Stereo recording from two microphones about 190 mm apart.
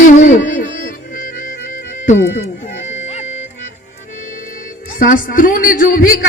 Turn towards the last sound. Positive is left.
turn(degrees=50)  # may be behind; listen again after turning